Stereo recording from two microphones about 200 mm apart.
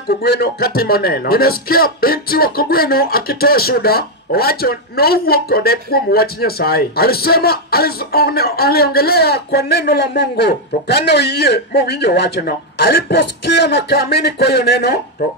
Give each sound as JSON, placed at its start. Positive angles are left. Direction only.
{"t": 0.3, "sound": "speech", "side_deg": 50}
{"t": 13.2, "sound": "speech", "side_deg": 65}